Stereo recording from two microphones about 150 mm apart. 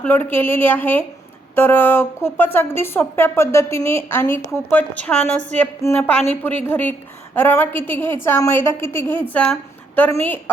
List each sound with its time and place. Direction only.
0.0 s a woman's voice: 15° left (ahead or behind)